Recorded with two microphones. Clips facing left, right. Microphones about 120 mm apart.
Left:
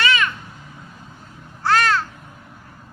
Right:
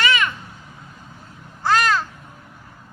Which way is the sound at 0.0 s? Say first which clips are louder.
Even; 20° right (ahead or behind).